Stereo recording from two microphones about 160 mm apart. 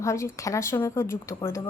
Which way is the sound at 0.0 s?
20° left (ahead or behind).